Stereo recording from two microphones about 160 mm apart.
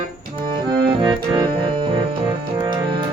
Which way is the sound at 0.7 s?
30° right (ahead or behind).